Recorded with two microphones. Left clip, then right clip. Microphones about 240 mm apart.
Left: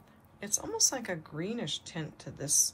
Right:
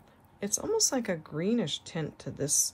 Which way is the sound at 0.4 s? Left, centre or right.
Right.